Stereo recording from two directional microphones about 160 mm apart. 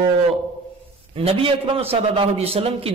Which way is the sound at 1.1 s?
35° right (ahead or behind).